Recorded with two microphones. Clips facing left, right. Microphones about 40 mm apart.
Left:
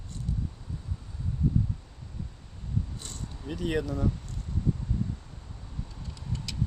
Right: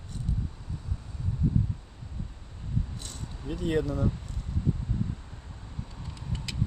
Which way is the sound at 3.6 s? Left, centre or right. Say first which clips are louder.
Right 2 dB; centre.